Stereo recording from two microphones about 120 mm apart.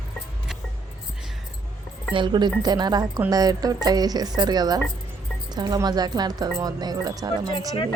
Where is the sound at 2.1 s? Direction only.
40° right (ahead or behind).